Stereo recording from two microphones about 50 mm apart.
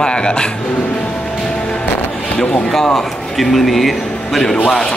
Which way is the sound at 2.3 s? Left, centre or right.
Left.